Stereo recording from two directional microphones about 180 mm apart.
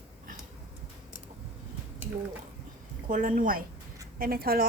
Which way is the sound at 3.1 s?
50° right (ahead or behind).